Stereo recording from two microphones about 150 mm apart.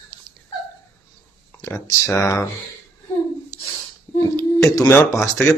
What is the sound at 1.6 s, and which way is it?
Speech, 20° left (ahead or behind).